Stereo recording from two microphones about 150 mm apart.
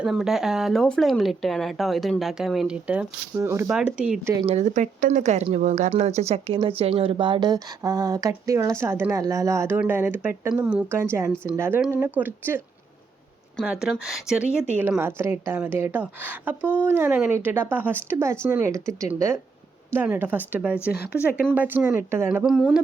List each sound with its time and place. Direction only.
0.0 s a woman's voice: 5° right (ahead or behind)
3.7 s speech: 5° right (ahead or behind)
4.2 s a woman's voice: 15° right (ahead or behind)
4.4 s a woman's voice: 50° right (ahead or behind); by 12.6 s 15° right (ahead or behind)
13.6 s a woman's voice: centre (ahead or behind); by 22.3 s 15° right (ahead or behind)
22.3 s speech: 5° right (ahead or behind)